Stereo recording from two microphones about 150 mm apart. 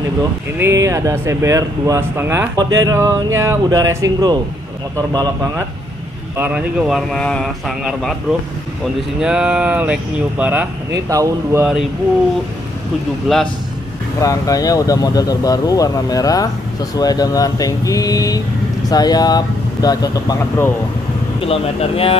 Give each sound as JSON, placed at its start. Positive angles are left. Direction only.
{"t": 0.6, "sound": "speech", "side_deg": -20}
{"t": 6.3, "sound": "speech", "side_deg": -10}
{"t": 11.1, "sound": "speech", "side_deg": -20}
{"t": 13.3, "sound": "speech", "side_deg": 0}
{"t": 14.2, "sound": "speech", "side_deg": 25}
{"t": 21.4, "sound": "speech", "side_deg": 40}